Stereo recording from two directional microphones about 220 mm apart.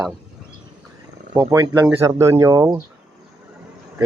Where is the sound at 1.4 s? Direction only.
20° right (ahead or behind).